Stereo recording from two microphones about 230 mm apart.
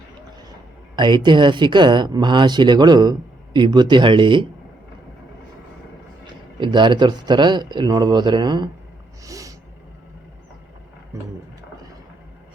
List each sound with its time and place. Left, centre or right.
0.9 s speech: centre
6.6 s speech: centre
9.2 s snort: centre